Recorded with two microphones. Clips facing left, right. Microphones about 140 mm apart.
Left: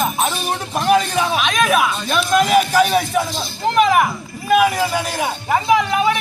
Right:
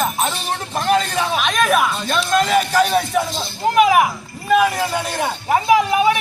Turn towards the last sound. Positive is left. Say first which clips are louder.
# right 1 dB
turn(degrees=-5)  # may be behind; listen again after turning